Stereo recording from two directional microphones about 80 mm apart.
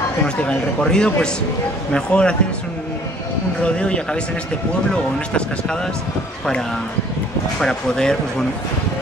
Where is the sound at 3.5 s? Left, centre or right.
Centre.